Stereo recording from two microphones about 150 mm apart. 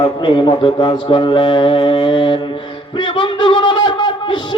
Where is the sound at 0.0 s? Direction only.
35° left (ahead or behind).